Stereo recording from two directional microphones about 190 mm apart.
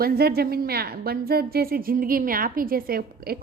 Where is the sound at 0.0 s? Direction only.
55° right (ahead or behind).